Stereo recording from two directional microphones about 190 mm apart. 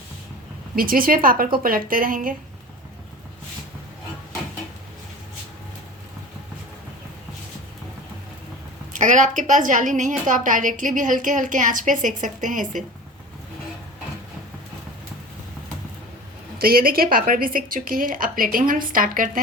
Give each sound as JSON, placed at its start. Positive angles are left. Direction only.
{"t": 0.8, "sound": "a woman's voice", "side_deg": -50}
{"t": 8.9, "sound": "a woman's voice", "side_deg": -40}
{"t": 16.6, "sound": "a woman's voice", "side_deg": -50}